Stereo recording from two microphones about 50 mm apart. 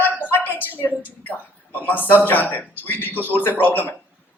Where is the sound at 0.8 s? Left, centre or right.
Left.